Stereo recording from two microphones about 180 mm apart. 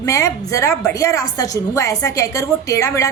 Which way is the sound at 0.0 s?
15° left (ahead or behind).